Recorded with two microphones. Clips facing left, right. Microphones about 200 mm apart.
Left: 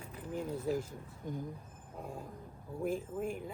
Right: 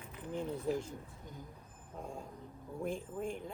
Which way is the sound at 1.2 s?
50° left (ahead or behind).